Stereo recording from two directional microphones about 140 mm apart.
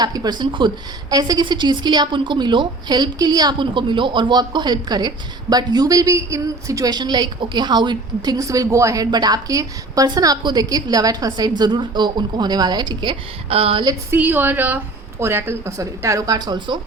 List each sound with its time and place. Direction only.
0.0 s a woman's voice: 30° right (ahead or behind)
14.1 s a woman's voice: 15° right (ahead or behind); by 16.7 s 30° right (ahead or behind)